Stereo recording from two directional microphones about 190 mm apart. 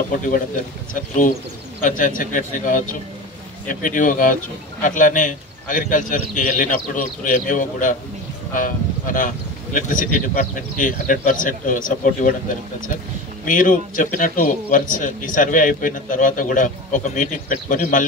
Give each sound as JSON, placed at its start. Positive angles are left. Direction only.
{"t": 0.9, "sound": "a man's voice", "side_deg": 45}